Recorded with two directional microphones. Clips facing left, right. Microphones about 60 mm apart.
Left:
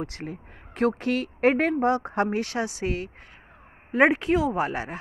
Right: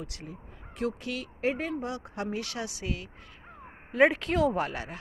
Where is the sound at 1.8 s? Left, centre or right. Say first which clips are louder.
Left 12 dB; left.